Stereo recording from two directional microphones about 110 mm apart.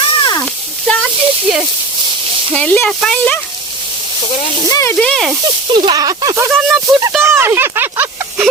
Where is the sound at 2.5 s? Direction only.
10° left (ahead or behind).